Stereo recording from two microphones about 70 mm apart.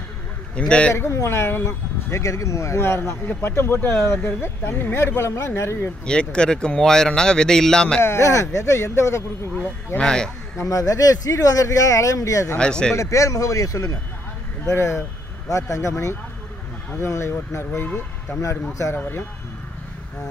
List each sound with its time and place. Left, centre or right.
0.6 s speech: centre
0.9 s speech: left
1.7 s speech: left
6.0 s speech: centre
8.0 s speech: left
9.9 s speech: centre
10.6 s speech: left
12.5 s speech: centre
12.9 s speech: left
14.7 s speech: left
15.4 s speech: left
17.8 s speech: left
18.4 s speech: left